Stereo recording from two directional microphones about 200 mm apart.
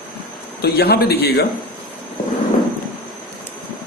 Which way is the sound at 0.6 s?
50° left (ahead or behind).